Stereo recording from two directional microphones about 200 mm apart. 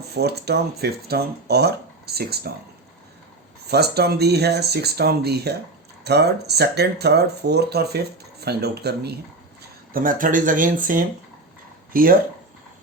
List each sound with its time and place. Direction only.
0.2 s speech: 55° right (ahead or behind)
3.7 s speech: 55° right (ahead or behind)
9.9 s speech: 45° right (ahead or behind)